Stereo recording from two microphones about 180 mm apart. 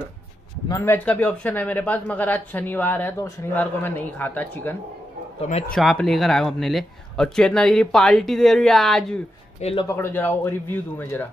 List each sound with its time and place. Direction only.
0.7 s speech: 15° left (ahead or behind)
5.8 s speech: centre (ahead or behind)
9.6 s speech: 35° left (ahead or behind)
9.8 s speech: 15° left (ahead or behind)